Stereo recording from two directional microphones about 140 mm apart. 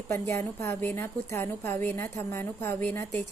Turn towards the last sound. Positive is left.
turn(degrees=15)  # may be behind; listen again after turning